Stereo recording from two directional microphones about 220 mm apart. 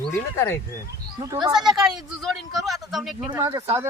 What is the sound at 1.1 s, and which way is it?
Speech, 15° right (ahead or behind).